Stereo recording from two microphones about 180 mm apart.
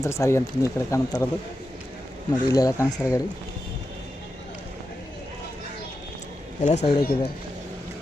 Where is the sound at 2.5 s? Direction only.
20° left (ahead or behind).